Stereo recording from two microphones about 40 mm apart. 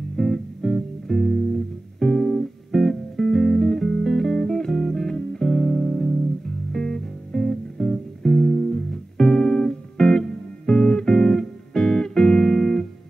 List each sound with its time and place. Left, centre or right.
0.1 s music: centre
2.3 s music: centre
12.4 s music: centre